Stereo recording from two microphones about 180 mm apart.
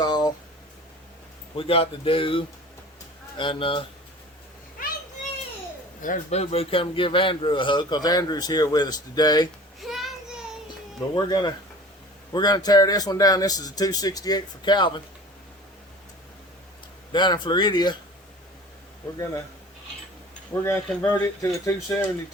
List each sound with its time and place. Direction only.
0.0 s a sound: 25° left (ahead or behind)
1.5 s a man's voice: 30° left (ahead or behind)
6.0 s a man's voice: 40° left (ahead or behind); by 9.5 s 20° left (ahead or behind)
9.8 s child singing: centre (ahead or behind)
11.1 s a man's voice: 25° left (ahead or behind)
17.1 s a man's voice: 25° left (ahead or behind)
20.5 s speech: 15° left (ahead or behind)